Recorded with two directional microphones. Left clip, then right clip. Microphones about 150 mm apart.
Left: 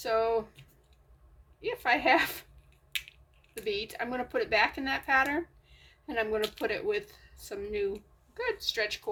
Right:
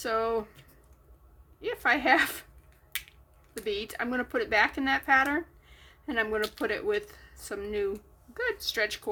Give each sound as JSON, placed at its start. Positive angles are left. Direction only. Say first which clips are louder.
{"t": 0.0, "sound": "speech", "louder": "left 1 dB", "side_deg": -40}
{"t": 1.6, "sound": "speech", "louder": "right 1 dB", "side_deg": -35}
{"t": 3.6, "sound": "speech", "louder": "right 1 dB", "side_deg": -40}